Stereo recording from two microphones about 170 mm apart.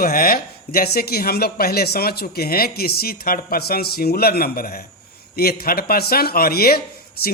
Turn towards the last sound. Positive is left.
turn(degrees=60)  # may be behind; listen again after turning